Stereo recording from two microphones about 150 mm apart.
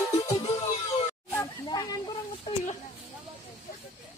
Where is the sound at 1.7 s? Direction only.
25° left (ahead or behind).